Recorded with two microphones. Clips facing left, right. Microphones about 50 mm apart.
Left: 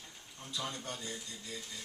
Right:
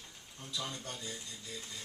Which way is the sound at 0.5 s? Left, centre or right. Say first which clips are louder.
Left 1 dB; centre.